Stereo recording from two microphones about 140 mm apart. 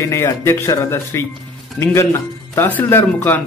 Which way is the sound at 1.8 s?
5° left (ahead or behind).